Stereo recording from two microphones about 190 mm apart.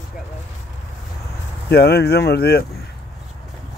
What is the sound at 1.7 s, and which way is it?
Speech, 55° left (ahead or behind).